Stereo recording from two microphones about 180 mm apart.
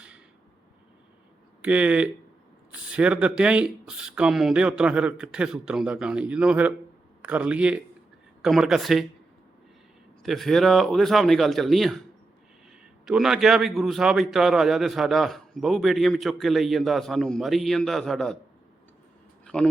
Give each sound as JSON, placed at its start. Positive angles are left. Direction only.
{"t": 1.6, "sound": "a man's voice", "side_deg": -5}
{"t": 10.2, "sound": "speech", "side_deg": 0}
{"t": 13.1, "sound": "speech", "side_deg": 0}